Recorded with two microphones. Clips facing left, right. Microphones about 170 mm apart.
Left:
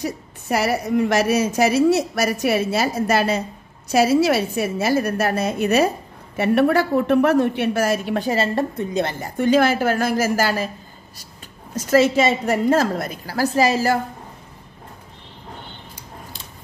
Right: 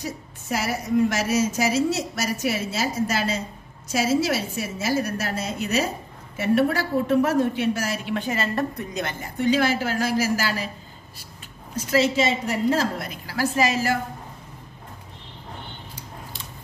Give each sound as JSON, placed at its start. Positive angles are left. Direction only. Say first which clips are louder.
{"t": 0.0, "sound": "a woman's voice", "louder": "left 6 dB", "side_deg": 65}
{"t": 9.4, "sound": "a woman's voice", "louder": "left 5 dB", "side_deg": 50}
{"t": 11.7, "sound": "a woman's voice", "louder": "left 5 dB", "side_deg": 45}